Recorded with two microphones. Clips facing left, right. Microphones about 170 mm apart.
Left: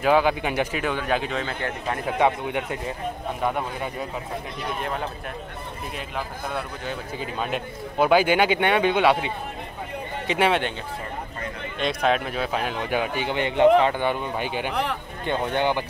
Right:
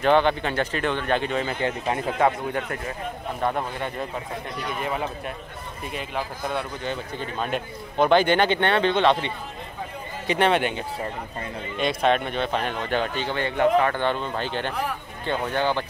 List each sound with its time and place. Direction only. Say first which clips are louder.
0.0 s speech: even; 5° left (ahead or behind)
2.0 s a man's voice: left 2 dB; 15° left (ahead or behind)
3.4 s a man's voice: right 1 dB; centre (ahead or behind)
11.8 s a man's voice: right 1 dB; centre (ahead or behind)
14.7 s speech: left 2 dB; 70° left (ahead or behind)
15.2 s a man's voice: left 1 dB; 15° left (ahead or behind)